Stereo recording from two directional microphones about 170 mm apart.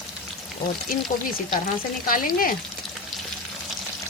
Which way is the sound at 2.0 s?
55° left (ahead or behind).